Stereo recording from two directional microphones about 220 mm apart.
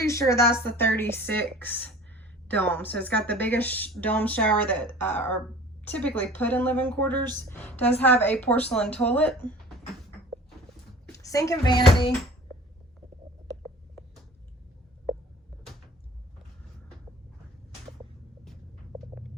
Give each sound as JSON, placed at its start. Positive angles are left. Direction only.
{"t": 0.0, "sound": "speech", "side_deg": 15}
{"t": 11.1, "sound": "speech", "side_deg": 15}